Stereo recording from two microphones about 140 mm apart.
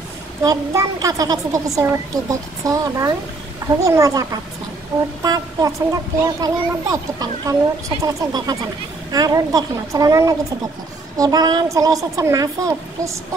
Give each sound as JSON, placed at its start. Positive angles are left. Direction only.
{"t": 0.4, "sound": "a child's voice", "side_deg": -25}